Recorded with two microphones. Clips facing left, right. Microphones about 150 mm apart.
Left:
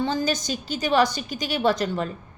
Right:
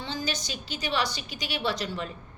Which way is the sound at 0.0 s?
50° left (ahead or behind).